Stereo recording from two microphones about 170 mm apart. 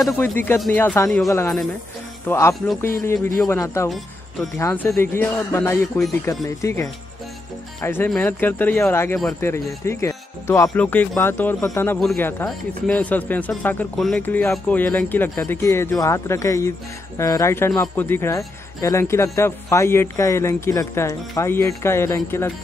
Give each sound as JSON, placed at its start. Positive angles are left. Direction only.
{"t": 0.2, "sound": "a man's voice", "side_deg": 10}